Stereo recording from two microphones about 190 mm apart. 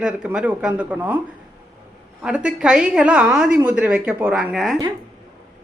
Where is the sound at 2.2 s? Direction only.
5° right (ahead or behind).